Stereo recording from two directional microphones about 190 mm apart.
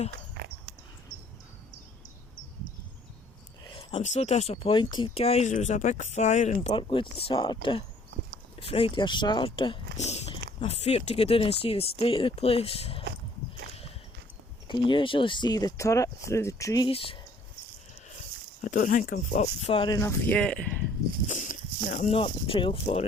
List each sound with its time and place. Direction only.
0.4 s a sound: 60° right (ahead or behind)
3.6 s speech: 25° left (ahead or behind)
6.7 s speech: 25° left (ahead or behind)
14.8 s speech: 25° left (ahead or behind)
18.6 s speech: 45° left (ahead or behind); by 20.0 s 25° left (ahead or behind)
20.0 s speech: 10° left (ahead or behind)
21.2 s a sound: 40° left (ahead or behind)
21.8 s speech: 40° left (ahead or behind)
22.2 s speech: 30° left (ahead or behind)